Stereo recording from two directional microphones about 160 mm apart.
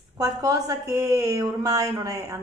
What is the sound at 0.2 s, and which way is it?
A woman's voice, 20° right (ahead or behind).